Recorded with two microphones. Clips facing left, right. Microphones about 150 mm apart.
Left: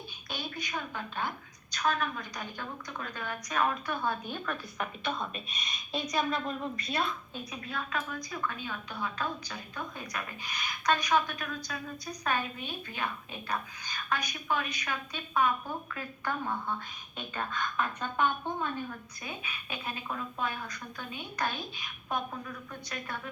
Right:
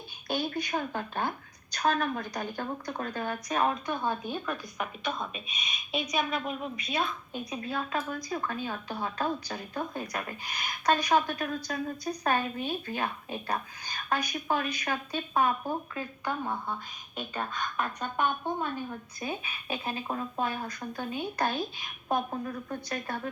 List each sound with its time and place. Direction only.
0.3 s a woman's voice: 35° right (ahead or behind); by 7.0 s 15° right (ahead or behind)
7.5 s a woman's voice: 30° right (ahead or behind)
16.0 s a woman's voice: 15° right (ahead or behind)
19.2 s a woman's voice: 30° right (ahead or behind)